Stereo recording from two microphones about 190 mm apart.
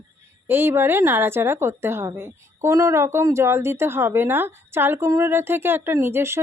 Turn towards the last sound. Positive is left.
turn(degrees=-15)  # may be behind; listen again after turning